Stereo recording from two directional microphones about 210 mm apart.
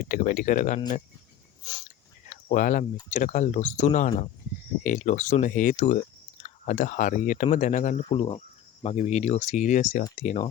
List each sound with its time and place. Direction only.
0.0 s speech: 40° left (ahead or behind)
2.3 s speech: 35° left (ahead or behind)